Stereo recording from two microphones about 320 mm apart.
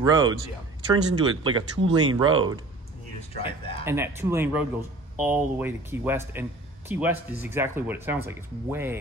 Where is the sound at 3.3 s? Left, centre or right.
Centre.